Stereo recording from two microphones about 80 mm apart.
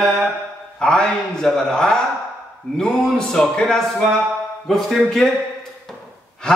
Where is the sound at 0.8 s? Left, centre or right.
Centre.